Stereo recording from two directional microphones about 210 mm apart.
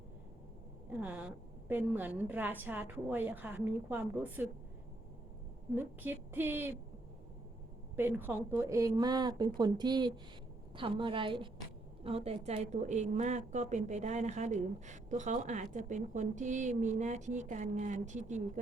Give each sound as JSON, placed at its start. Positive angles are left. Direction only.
{"t": 0.9, "sound": "a woman's voice", "side_deg": -10}
{"t": 5.7, "sound": "a woman's voice", "side_deg": -10}
{"t": 7.9, "sound": "a woman's voice", "side_deg": -10}